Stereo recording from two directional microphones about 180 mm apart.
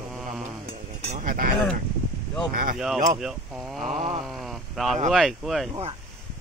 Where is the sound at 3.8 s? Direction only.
40° right (ahead or behind).